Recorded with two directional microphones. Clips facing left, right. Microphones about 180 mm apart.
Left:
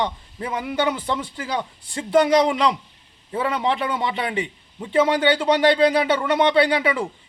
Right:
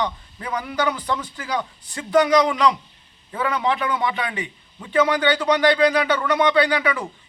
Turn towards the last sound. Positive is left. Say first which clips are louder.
# left 1 dB
turn(degrees=25)  # may be behind; listen again after turning